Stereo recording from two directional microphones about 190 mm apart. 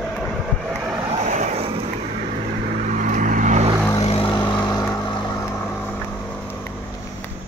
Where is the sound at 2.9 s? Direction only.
45° right (ahead or behind).